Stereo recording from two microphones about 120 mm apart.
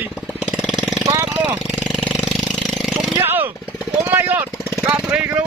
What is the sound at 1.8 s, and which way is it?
Engine, centre (ahead or behind).